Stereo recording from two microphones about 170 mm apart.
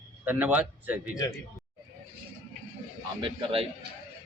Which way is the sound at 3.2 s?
30° right (ahead or behind).